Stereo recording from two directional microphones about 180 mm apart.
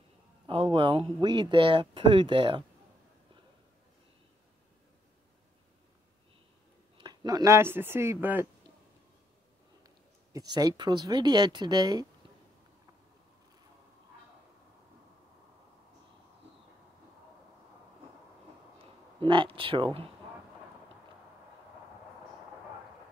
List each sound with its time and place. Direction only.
0.5 s speech: 30° right (ahead or behind)
7.0 s speech: 20° right (ahead or behind)
9.8 s speech: 20° right (ahead or behind)
18.8 s speech: 25° right (ahead or behind)